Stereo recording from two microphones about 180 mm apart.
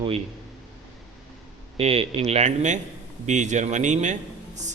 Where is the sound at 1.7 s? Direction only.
30° right (ahead or behind).